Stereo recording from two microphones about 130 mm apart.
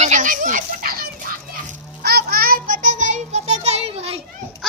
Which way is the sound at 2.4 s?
90° right.